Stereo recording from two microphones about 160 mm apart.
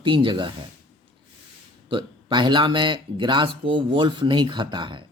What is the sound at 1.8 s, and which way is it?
Speech, 30° right (ahead or behind).